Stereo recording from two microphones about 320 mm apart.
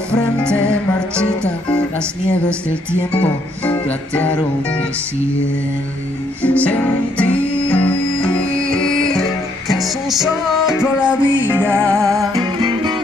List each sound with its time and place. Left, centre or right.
0.4 s music: centre
3.6 s music: centre
6.4 s music: centre